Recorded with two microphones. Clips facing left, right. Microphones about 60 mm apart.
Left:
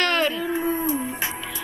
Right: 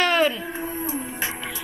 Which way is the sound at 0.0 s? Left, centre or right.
Centre.